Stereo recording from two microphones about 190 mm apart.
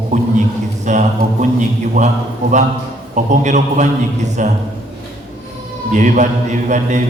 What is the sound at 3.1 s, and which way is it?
A man's voice, 40° right (ahead or behind).